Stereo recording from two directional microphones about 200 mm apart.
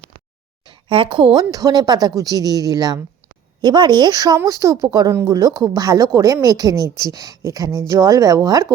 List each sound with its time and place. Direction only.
0.7 s a woman's voice: 25° right (ahead or behind)